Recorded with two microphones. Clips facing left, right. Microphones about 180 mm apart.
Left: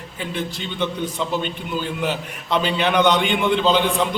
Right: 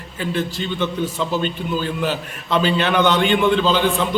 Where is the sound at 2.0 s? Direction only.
15° left (ahead or behind).